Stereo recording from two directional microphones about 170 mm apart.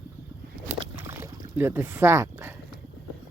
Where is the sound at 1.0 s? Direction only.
15° right (ahead or behind).